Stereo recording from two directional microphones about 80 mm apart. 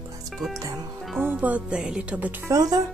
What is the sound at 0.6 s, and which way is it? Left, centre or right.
Speech, right.